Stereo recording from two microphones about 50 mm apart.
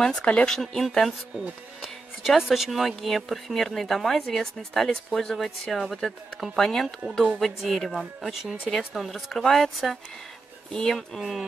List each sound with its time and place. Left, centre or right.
0.2 s speech: left
0.5 s speech: centre